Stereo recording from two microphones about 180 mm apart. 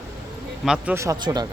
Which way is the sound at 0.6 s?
5° right (ahead or behind).